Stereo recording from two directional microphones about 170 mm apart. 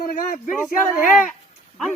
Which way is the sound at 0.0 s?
55° left (ahead or behind).